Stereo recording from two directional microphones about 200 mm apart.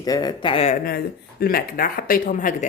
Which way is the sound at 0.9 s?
50° left (ahead or behind).